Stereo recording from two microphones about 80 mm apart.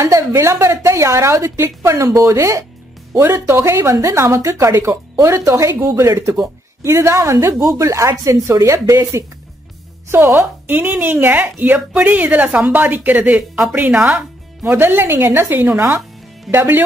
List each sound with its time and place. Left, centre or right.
0.0 s a woman's voice: right
10.0 s speech: right